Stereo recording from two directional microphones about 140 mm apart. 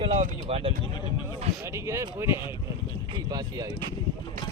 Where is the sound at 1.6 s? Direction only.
20° right (ahead or behind).